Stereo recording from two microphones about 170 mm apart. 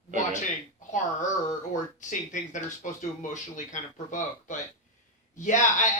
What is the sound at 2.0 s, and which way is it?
A woman's voice, 45° left (ahead or behind).